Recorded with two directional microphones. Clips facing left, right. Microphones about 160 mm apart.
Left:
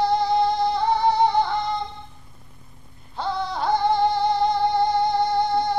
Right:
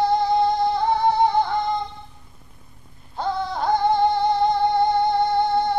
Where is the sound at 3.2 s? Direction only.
50° right (ahead or behind).